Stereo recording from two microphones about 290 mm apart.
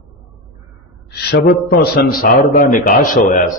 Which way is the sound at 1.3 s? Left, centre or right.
Left.